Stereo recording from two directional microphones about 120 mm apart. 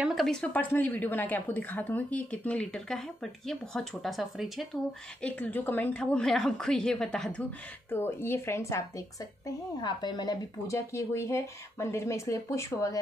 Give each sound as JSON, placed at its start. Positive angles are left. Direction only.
{"t": 0.0, "sound": "a woman's voice", "side_deg": 0}
{"t": 5.2, "sound": "a woman's voice", "side_deg": 15}
{"t": 7.9, "sound": "speech", "side_deg": 20}
{"t": 9.8, "sound": "speech", "side_deg": 35}